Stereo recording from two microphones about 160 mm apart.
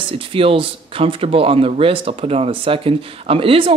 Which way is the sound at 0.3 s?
35° right (ahead or behind).